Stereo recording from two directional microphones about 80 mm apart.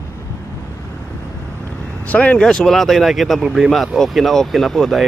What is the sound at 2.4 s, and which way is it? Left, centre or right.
Speech, centre.